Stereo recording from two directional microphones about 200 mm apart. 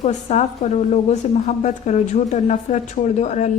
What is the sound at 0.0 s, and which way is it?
A woman's voice, 35° left (ahead or behind).